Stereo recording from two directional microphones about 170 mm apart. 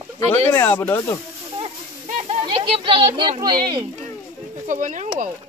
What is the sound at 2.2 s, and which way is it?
Children playing, 35° right (ahead or behind).